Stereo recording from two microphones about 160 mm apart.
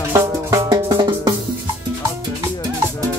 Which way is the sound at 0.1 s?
20° right (ahead or behind).